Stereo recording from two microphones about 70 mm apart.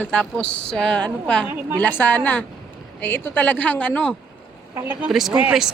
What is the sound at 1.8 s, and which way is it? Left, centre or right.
A woman's voice, left.